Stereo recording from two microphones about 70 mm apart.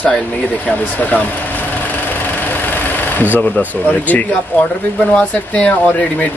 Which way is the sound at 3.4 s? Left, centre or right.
Left.